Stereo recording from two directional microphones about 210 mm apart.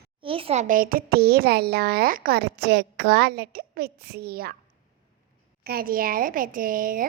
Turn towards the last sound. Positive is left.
turn(degrees=-40)  # may be behind; listen again after turning